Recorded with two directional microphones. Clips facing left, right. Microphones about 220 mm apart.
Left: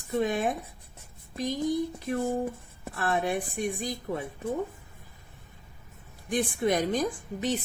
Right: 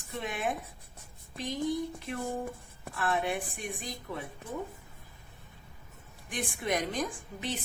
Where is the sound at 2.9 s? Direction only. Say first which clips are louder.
Left 3 dB; 40° left (ahead or behind).